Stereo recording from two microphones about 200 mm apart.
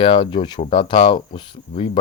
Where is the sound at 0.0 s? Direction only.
25° left (ahead or behind).